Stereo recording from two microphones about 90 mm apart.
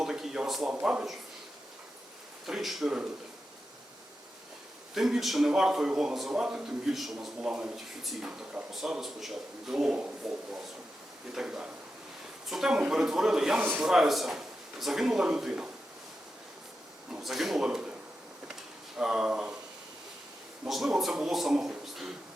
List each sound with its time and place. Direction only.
0.0 s a sound: 5° right (ahead or behind)
0.7 s speech: 10° right (ahead or behind)
2.5 s a man's voice: centre (ahead or behind)
4.9 s a man's voice: 5° right (ahead or behind)
13.6 s a man's voice: 20° right (ahead or behind)
13.8 s a man's voice: 5° right (ahead or behind)
17.1 s speech: 5° right (ahead or behind)
18.9 s speech: 10° right (ahead or behind)
20.7 s a man's voice: 5° right (ahead or behind)